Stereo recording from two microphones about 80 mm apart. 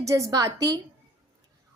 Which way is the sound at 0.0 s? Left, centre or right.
Right.